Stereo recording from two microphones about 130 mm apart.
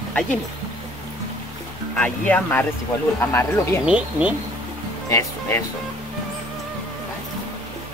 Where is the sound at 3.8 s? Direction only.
10° right (ahead or behind).